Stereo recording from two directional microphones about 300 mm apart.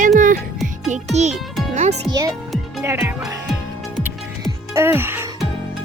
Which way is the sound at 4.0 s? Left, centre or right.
Centre.